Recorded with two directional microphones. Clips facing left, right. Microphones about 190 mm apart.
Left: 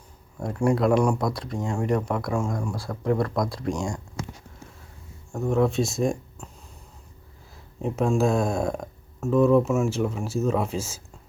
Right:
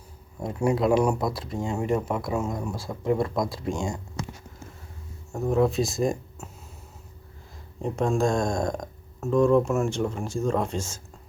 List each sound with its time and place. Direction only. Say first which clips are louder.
0.3 s speech: left 1 dB; 5° right (ahead or behind)
5.3 s speech: even; centre (ahead or behind)
6.4 s a sound: right 1 dB; 5° right (ahead or behind)
7.8 s speech: left 1 dB; 5° left (ahead or behind)